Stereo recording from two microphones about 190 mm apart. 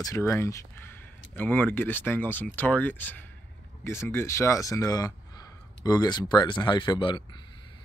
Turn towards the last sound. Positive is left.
turn(degrees=25)  # may be behind; listen again after turning